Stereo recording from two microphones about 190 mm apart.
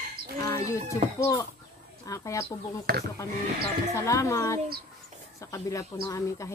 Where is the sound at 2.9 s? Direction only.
55° right (ahead or behind).